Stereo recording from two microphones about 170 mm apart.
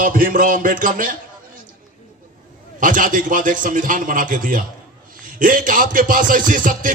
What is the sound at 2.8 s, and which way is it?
A man's voice, 50° right (ahead or behind).